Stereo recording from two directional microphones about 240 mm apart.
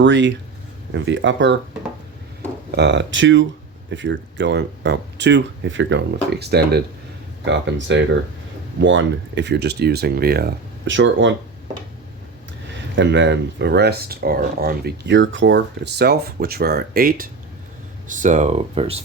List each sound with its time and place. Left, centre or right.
0.0 s speech: right
2.7 s speech: right
13.0 s speech: right